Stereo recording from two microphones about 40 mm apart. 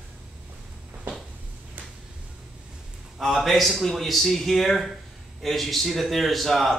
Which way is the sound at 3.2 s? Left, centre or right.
Centre.